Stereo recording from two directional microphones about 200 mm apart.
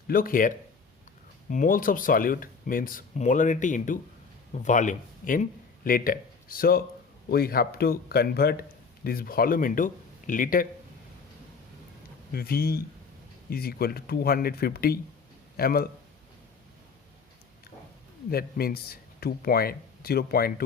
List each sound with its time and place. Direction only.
0.1 s speech: 45° left (ahead or behind)
12.3 s speech: 50° left (ahead or behind)
18.3 s speech: 50° left (ahead or behind)